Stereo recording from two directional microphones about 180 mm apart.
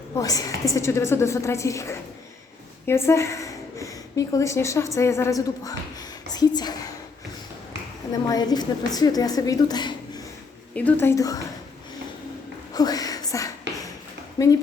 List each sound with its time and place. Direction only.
0.2 s a woman's voice: 20° left (ahead or behind)
8.1 s a woman's voice: 20° left (ahead or behind)
10.8 s a woman's voice: 10° left (ahead or behind)
12.7 s a sound: 20° left (ahead or behind)
14.4 s a woman's voice: 20° left (ahead or behind)